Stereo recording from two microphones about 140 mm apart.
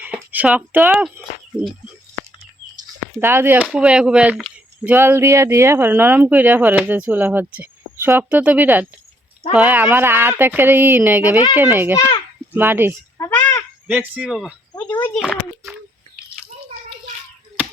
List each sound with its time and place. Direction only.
0.0 s a sound: 10° right (ahead or behind)
3.2 s speech: 15° right (ahead or behind)
4.9 s speech: 15° right (ahead or behind)
11.9 s a child's voice: 30° left (ahead or behind)
12.5 s speech: 15° right (ahead or behind)
13.1 s crow: 20° left (ahead or behind)
13.8 s speech: 10° right (ahead or behind)
14.7 s speech: 15° left (ahead or behind)